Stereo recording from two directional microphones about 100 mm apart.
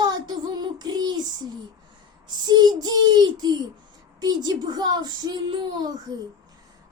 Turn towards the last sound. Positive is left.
turn(degrees=-40)  # may be behind; listen again after turning